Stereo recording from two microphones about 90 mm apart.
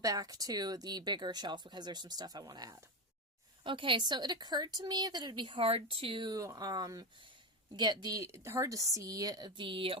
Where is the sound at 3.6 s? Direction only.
70° right (ahead or behind).